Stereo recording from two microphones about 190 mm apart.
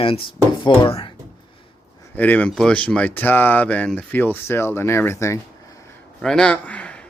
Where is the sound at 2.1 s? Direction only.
10° left (ahead or behind).